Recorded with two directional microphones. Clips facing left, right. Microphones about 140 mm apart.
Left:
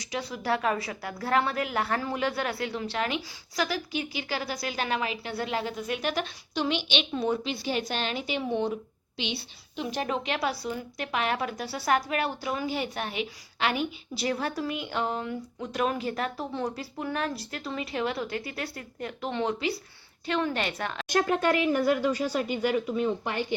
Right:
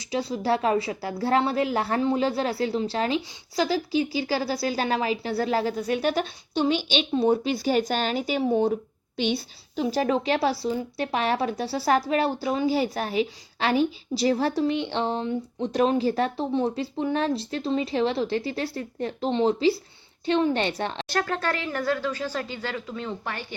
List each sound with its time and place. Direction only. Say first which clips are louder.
0.1 s a woman's voice: right 5 dB; 30° right (ahead or behind); by 9.8 s 45° right (ahead or behind)
9.8 s a woman's voice: right 7 dB; 35° right (ahead or behind)
21.1 s speech: left 5 dB; 15° left (ahead or behind)